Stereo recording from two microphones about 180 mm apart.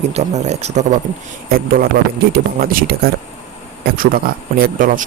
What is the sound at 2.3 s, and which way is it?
Speech, 55° right (ahead or behind).